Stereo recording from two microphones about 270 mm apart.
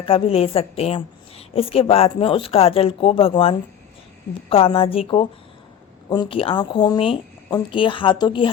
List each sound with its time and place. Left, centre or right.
0.0 s a woman's voice: left